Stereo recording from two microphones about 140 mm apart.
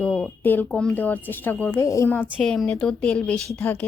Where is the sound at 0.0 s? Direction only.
10° left (ahead or behind).